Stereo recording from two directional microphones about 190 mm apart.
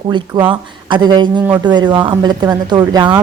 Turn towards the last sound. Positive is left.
turn(degrees=-20)  # may be behind; listen again after turning